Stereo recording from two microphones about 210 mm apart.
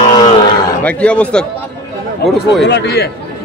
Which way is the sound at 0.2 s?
20° left (ahead or behind).